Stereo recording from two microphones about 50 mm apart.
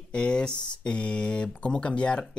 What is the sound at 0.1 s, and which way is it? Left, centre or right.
Speech, centre.